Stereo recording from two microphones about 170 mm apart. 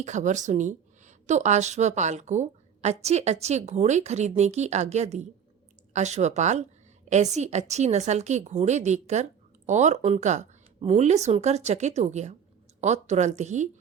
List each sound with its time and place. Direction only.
0.0 s a woman's voice: 45° right (ahead or behind)